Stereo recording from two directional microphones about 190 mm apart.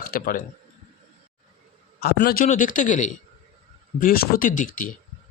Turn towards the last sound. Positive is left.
turn(degrees=45)  # may be behind; listen again after turning